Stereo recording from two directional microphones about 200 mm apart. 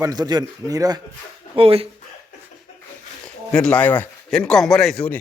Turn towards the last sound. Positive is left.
turn(degrees=5)  # may be behind; listen again after turning